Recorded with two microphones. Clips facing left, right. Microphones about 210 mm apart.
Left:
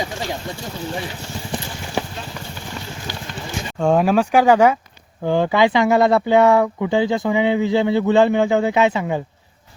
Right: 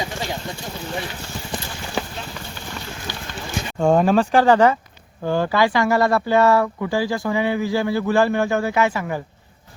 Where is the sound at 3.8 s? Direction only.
Centre (ahead or behind); by 9.2 s 20° left (ahead or behind).